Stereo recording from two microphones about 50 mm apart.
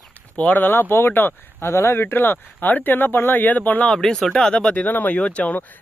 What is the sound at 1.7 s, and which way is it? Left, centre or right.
Speech, left.